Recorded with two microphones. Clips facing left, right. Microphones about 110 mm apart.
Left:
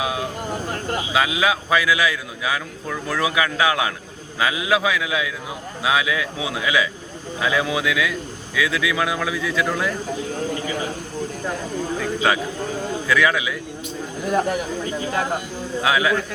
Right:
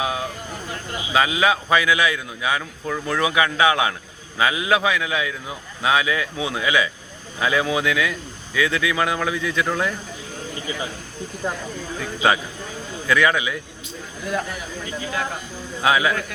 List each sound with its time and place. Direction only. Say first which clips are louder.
0.0 s a man's voice: even; centre (ahead or behind)
0.7 s speech: left 4 dB; 50° left (ahead or behind)
1.1 s a man's voice: right 2 dB; centre (ahead or behind)
12.2 s a man's voice: right 3 dB; centre (ahead or behind)
14.3 s speech: left 6 dB; 40° left (ahead or behind)
15.8 s a man's voice: right 1 dB; centre (ahead or behind)